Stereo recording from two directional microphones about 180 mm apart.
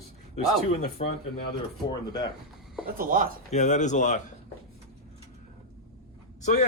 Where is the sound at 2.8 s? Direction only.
50° right (ahead or behind).